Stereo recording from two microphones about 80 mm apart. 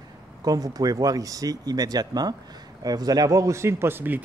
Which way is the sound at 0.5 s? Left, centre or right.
Right.